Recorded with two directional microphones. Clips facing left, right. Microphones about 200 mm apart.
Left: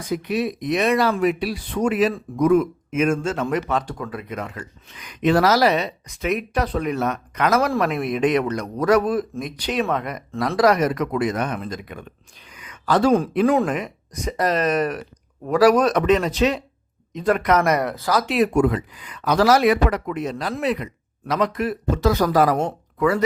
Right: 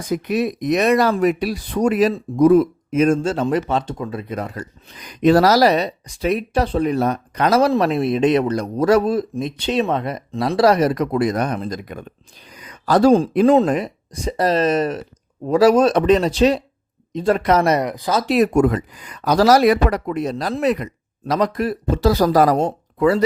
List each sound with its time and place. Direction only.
0.1 s a man's voice: 45° right (ahead or behind); by 10.2 s 30° right (ahead or behind)
10.3 s a man's voice: 20° right (ahead or behind)
10.6 s speech: 30° right (ahead or behind)
12.5 s a sound: 35° right (ahead or behind)
13.4 s a man's voice: 25° right (ahead or behind)
13.7 s a man's voice: 35° right (ahead or behind)
17.8 s speech: 15° right (ahead or behind)
18.3 s speech: 45° right (ahead or behind)